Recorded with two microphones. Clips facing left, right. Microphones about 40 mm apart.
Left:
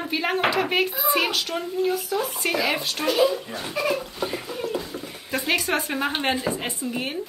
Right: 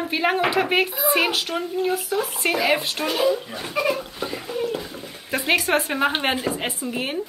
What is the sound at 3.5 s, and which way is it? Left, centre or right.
Speech, centre.